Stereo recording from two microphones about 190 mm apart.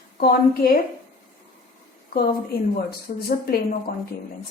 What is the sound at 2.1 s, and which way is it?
A woman's voice, 55° left (ahead or behind).